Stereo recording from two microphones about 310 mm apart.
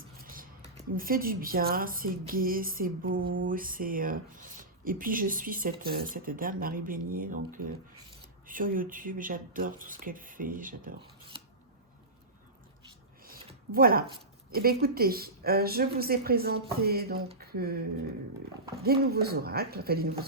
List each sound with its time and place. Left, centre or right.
0.2 s speech: right
13.7 s speech: right
18.8 s speech: right